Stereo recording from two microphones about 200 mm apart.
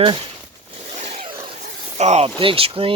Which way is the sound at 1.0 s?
35° right (ahead or behind).